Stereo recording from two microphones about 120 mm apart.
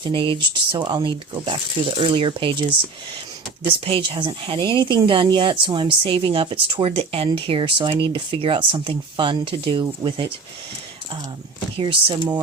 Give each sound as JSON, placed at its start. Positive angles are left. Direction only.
{"t": 0.0, "sound": "speech", "side_deg": -45}
{"t": 11.8, "sound": "speech", "side_deg": -45}